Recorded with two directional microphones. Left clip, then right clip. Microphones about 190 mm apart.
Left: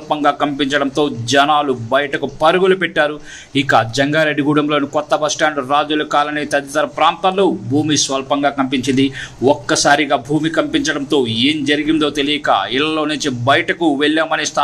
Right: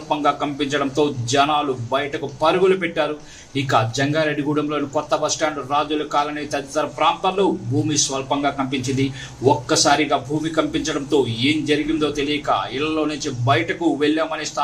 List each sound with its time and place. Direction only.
0.1 s speech: 30° left (ahead or behind)